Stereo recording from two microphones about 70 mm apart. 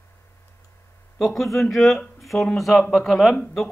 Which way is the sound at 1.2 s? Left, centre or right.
Centre.